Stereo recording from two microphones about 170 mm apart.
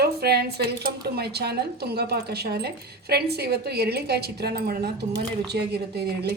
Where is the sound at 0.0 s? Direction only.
70° right (ahead or behind).